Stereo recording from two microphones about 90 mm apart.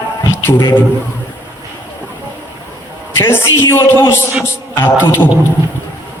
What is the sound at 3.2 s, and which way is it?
A man's voice, 25° left (ahead or behind).